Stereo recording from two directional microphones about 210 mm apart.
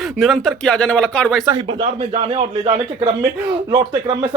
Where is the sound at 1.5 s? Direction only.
20° right (ahead or behind).